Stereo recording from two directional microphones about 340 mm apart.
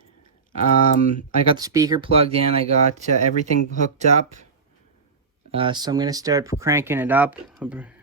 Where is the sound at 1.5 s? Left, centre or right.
Centre.